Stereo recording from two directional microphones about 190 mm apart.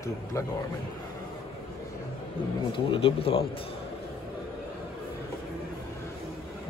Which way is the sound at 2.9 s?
30° left (ahead or behind).